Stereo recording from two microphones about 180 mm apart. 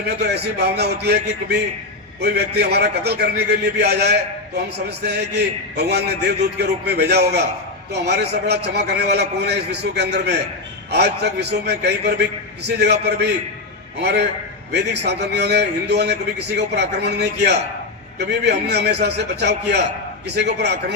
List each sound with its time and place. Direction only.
0.0 s a man's voice: 65° right (ahead or behind)